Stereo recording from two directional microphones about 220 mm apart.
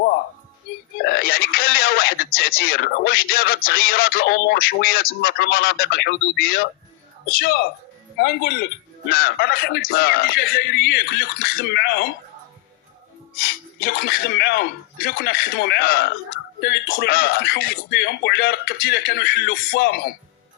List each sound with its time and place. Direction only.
1.0 s speech: 45° left (ahead or behind)
13.8 s speech: 45° left (ahead or behind)